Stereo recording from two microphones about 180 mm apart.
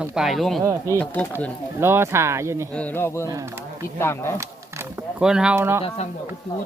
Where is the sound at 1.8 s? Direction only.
15° right (ahead or behind).